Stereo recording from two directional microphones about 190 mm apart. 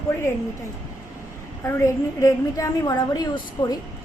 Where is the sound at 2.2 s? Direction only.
15° left (ahead or behind).